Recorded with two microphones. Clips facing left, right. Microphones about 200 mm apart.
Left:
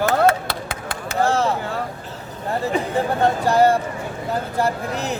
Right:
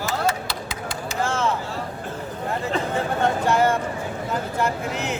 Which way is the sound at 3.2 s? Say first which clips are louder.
Left 4 dB; 35° left (ahead or behind).